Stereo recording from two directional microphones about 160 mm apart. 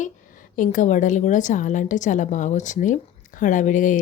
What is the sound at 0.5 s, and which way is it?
A woman's voice, 55° left (ahead or behind).